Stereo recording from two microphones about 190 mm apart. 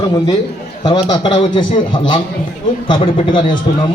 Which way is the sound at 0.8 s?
25° left (ahead or behind).